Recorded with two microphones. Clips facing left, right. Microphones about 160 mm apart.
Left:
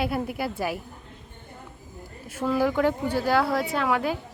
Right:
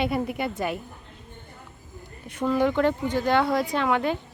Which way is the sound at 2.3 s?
5° left (ahead or behind).